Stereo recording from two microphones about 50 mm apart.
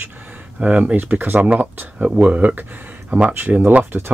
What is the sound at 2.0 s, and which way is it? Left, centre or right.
Speech, right.